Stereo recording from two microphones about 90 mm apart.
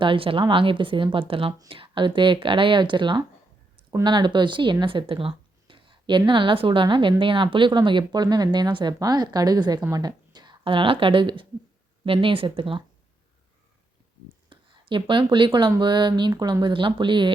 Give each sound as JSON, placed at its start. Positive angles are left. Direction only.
{"t": 0.0, "sound": "a woman's voice", "side_deg": -75}
{"t": 1.3, "sound": "speech", "side_deg": -90}
{"t": 1.7, "sound": "a woman's voice", "side_deg": -75}
{"t": 12.0, "sound": "speech", "side_deg": -85}
{"t": 14.5, "sound": "speech", "side_deg": -65}
{"t": 16.3, "sound": "speech", "side_deg": -45}